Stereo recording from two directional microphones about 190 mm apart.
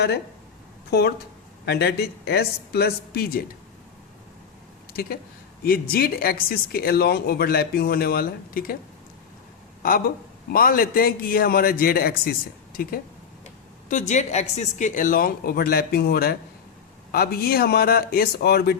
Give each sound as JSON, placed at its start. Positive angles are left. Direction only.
{"t": 0.9, "sound": "speech", "side_deg": 60}
{"t": 5.9, "sound": "speech", "side_deg": 50}
{"t": 10.5, "sound": "speech", "side_deg": 50}
{"t": 13.4, "sound": "speech", "side_deg": 40}